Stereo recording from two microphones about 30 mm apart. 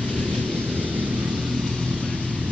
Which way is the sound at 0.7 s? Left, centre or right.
Right.